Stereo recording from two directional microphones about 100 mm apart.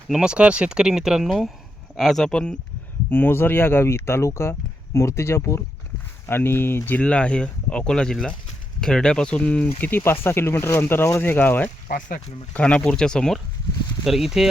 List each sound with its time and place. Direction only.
0.1 s speech: 10° right (ahead or behind); by 2.6 s 10° left (ahead or behind)
3.1 s speech: 20° left (ahead or behind); by 14.5 s 5° right (ahead or behind)